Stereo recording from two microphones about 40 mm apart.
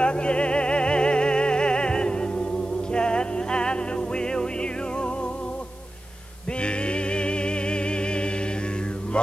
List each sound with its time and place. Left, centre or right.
0.0 s music: left
6.6 s music: left